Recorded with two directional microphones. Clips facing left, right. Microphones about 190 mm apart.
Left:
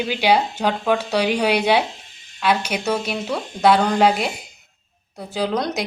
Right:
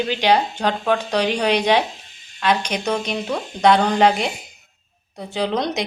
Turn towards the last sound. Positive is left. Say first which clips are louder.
# even
turn(degrees=0)  # may be behind; listen again after turning